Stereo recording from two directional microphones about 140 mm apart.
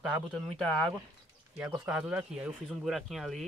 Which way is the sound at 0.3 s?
5° left (ahead or behind).